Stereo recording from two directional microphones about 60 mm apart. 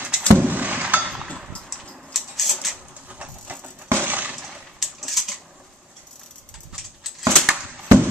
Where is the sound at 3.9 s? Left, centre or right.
Right.